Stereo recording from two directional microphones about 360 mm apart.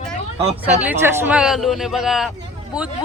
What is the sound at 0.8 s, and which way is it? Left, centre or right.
Speech, centre.